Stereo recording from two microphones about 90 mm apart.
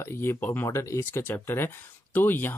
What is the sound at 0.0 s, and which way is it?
Speech, 25° left (ahead or behind).